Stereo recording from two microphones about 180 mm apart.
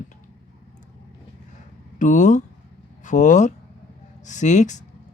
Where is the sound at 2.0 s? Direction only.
45° left (ahead or behind).